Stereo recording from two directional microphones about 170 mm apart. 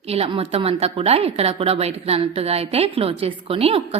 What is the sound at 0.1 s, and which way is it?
A woman's voice, 35° right (ahead or behind).